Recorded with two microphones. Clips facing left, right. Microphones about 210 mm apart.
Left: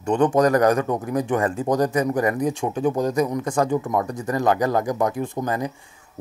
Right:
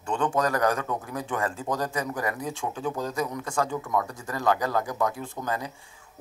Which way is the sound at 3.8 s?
40° left (ahead or behind).